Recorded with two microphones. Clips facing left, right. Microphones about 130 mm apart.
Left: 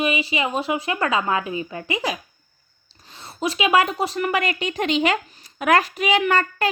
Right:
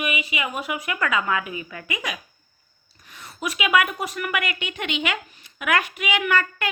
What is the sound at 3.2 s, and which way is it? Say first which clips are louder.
Speech: left 4 dB; 30° left (ahead or behind).